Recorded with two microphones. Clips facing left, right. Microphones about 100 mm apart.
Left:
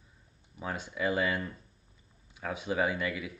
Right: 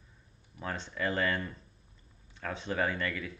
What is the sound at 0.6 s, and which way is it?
Speech, 10° left (ahead or behind).